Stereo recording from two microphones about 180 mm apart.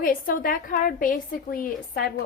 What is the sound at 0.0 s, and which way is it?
A woman's voice, 50° left (ahead or behind).